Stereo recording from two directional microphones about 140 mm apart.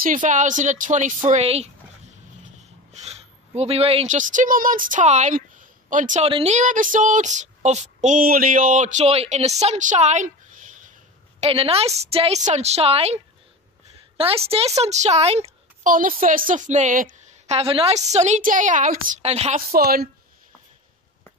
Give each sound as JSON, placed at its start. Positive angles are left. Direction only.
{"t": 0.0, "sound": "speech", "side_deg": -65}
{"t": 1.4, "sound": "dog", "side_deg": -50}
{"t": 4.1, "sound": "a woman's voice", "side_deg": -65}
{"t": 6.2, "sound": "speech", "side_deg": -50}
{"t": 11.3, "sound": "a woman's voice", "side_deg": -45}
{"t": 15.8, "sound": "a woman's voice", "side_deg": -80}
{"t": 17.5, "sound": "speech", "side_deg": -45}
{"t": 19.2, "sound": "a woman's voice", "side_deg": -45}
{"t": 19.7, "sound": "a woman's voice", "side_deg": -90}